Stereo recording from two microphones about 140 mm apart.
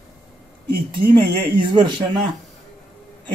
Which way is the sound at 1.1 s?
35° right (ahead or behind).